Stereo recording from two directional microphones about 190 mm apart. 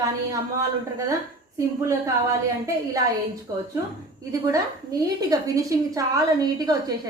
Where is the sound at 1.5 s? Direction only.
15° right (ahead or behind).